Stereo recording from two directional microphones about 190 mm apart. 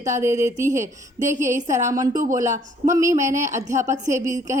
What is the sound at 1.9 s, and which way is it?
A woman's voice, 20° right (ahead or behind).